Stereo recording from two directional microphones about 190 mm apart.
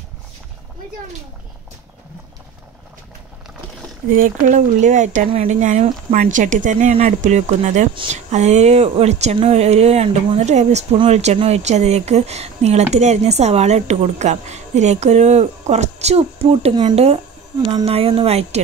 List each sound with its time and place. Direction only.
4.1 s speech: 45° right (ahead or behind)
7.9 s speech: 25° right (ahead or behind)
8.3 s speech: 35° right (ahead or behind)